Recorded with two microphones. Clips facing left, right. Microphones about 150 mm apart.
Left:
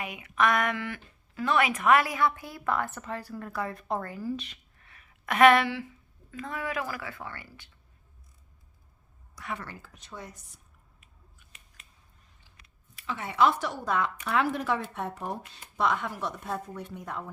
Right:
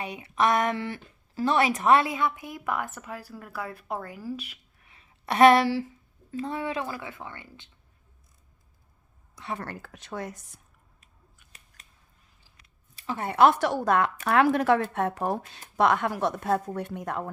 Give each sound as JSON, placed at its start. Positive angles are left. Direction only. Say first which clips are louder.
{"t": 0.0, "sound": "speech", "louder": "right 2 dB", "side_deg": -30}
{"t": 5.2, "sound": "a woman's voice", "louder": "right 2 dB", "side_deg": -35}
{"t": 9.3, "sound": "a woman's voice", "louder": "right 2 dB", "side_deg": -25}
{"t": 9.6, "sound": "a woman's voice", "louder": "right 5 dB", "side_deg": -65}
{"t": 13.0, "sound": "speech", "louder": "right 4 dB", "side_deg": -45}
{"t": 15.8, "sound": "speech", "louder": "right 6 dB", "side_deg": -70}